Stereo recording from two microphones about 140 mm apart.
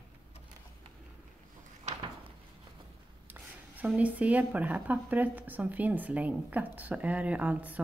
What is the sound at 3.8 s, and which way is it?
Speech, 10° right (ahead or behind).